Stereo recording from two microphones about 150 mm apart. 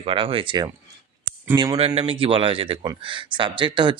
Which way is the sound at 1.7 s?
45° right (ahead or behind).